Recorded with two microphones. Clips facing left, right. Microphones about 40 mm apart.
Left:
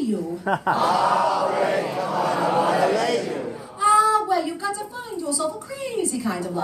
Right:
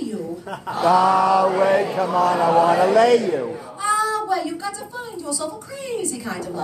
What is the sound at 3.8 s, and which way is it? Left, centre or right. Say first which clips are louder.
Child singing: left 4 dB; centre.